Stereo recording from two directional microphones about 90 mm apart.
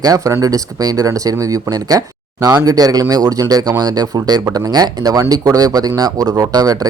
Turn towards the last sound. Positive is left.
turn(degrees=-45)  # may be behind; listen again after turning